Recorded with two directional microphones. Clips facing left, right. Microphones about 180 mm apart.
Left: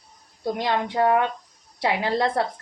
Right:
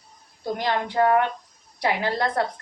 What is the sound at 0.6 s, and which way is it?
Speech, 20° left (ahead or behind).